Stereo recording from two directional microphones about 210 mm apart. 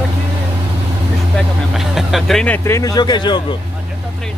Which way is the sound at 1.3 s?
Centre (ahead or behind).